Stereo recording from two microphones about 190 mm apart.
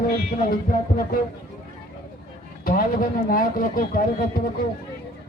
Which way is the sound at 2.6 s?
45° left (ahead or behind).